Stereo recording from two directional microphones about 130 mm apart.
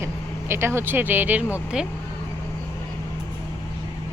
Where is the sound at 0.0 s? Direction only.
20° right (ahead or behind).